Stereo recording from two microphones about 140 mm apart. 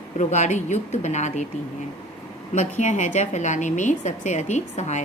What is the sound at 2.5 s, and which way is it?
Speech, 60° left (ahead or behind).